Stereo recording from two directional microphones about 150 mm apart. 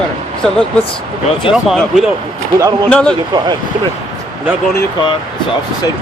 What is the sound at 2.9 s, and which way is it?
Speech, 5° left (ahead or behind).